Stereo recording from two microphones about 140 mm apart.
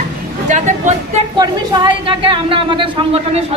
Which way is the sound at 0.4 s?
60° right (ahead or behind).